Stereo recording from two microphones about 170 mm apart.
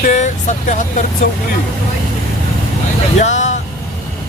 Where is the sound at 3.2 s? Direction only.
45° left (ahead or behind).